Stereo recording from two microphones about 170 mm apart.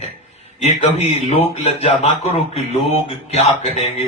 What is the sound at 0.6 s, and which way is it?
Speech, 35° left (ahead or behind).